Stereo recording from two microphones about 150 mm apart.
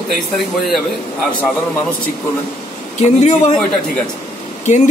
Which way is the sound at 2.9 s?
50° left (ahead or behind).